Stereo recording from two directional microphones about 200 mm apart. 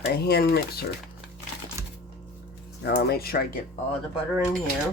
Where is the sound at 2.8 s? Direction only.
55° left (ahead or behind).